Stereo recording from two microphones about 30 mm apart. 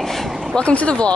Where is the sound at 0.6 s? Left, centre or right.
Left.